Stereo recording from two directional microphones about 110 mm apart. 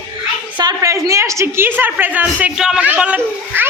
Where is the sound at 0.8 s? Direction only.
30° right (ahead or behind).